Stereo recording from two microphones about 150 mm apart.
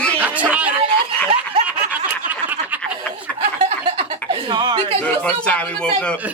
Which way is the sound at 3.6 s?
45° right (ahead or behind).